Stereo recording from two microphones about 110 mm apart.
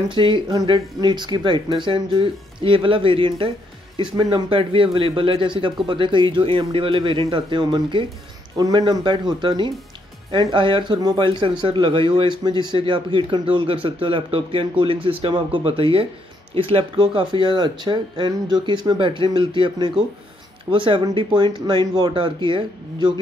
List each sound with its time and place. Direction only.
0.1 s speech: 45° right (ahead or behind)